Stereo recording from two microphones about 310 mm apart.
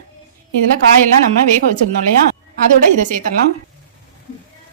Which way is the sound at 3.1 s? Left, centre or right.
Right.